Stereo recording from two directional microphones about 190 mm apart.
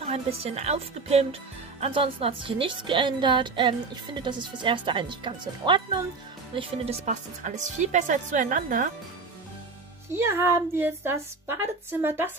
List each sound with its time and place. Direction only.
0.0 s a woman's voice: 30° right (ahead or behind)
10.1 s a woman's voice: 15° right (ahead or behind)